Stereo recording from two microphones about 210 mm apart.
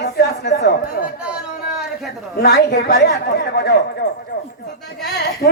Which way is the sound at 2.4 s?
50° left (ahead or behind).